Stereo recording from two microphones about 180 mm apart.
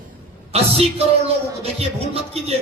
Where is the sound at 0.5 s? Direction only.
35° right (ahead or behind).